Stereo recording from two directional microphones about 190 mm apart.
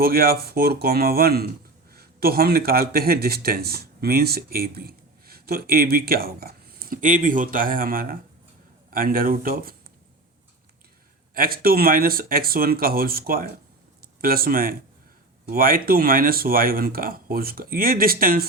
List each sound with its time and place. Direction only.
0.0 s speech: 55° right (ahead or behind)
11.3 s speech: 50° right (ahead or behind)